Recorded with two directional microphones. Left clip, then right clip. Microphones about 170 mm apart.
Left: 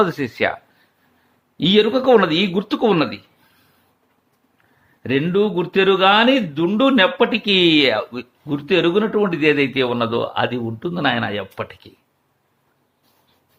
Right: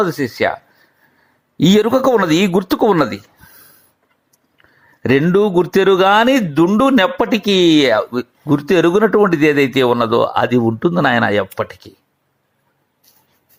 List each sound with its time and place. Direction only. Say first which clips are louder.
0.0 s speech: right 2 dB; 15° right (ahead or behind)
1.7 s speech: even; 50° right (ahead or behind)
5.3 s speech: right 5 dB; 45° right (ahead or behind)
7.4 s speech: right 4 dB; 25° right (ahead or behind)